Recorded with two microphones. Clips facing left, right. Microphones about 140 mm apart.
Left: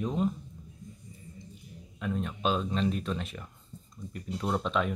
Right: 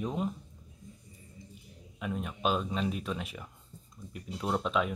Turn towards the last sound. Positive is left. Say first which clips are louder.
# left 1 dB
turn(degrees=-5)  # may be behind; listen again after turning